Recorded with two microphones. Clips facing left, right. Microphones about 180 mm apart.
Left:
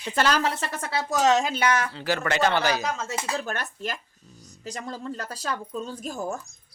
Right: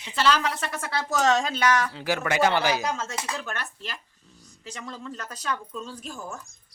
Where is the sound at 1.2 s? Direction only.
15° left (ahead or behind).